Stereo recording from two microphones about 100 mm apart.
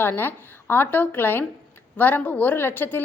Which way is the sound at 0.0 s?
20° left (ahead or behind).